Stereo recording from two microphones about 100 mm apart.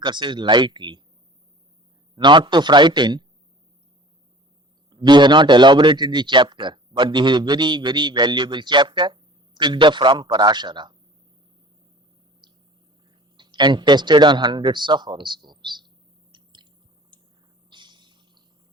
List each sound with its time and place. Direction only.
0.0 s a man's voice: 50° right (ahead or behind)
2.1 s a man's voice: 50° right (ahead or behind)
4.9 s a man's voice: 45° right (ahead or behind)
12.4 s a sound: 45° right (ahead or behind)
13.3 s a man's voice: 50° right (ahead or behind)
16.3 s chewing: 50° right (ahead or behind)
17.1 s a sound: 50° right (ahead or behind)